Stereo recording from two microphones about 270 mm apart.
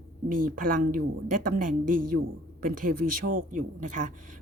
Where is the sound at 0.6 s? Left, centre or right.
Right.